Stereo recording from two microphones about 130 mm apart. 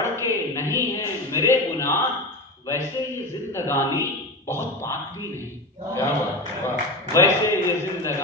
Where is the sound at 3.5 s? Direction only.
20° left (ahead or behind).